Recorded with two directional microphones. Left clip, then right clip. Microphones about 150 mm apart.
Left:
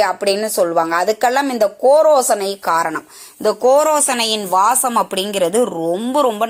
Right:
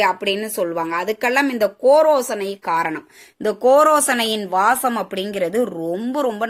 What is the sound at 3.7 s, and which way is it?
A woman's voice, 5° right (ahead or behind).